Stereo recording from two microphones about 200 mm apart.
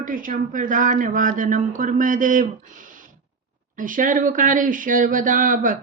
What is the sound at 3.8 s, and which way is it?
Speech, 40° right (ahead or behind).